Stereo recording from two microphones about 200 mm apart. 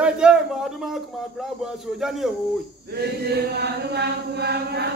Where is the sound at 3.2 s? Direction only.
55° right (ahead or behind).